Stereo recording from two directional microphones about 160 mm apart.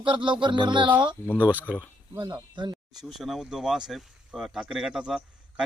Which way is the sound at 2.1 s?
25° right (ahead or behind).